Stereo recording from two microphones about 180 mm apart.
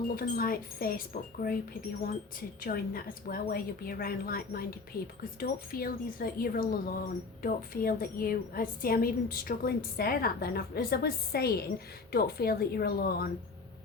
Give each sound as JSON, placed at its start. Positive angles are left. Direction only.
{"t": 0.2, "sound": "speech", "side_deg": 55}
{"t": 2.6, "sound": "a woman's voice", "side_deg": 55}